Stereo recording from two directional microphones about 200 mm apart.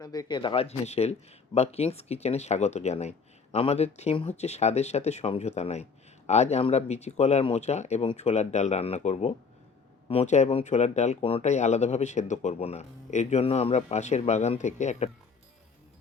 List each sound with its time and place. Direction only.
0.0 s speech: 20° left (ahead or behind); by 15.1 s 35° left (ahead or behind)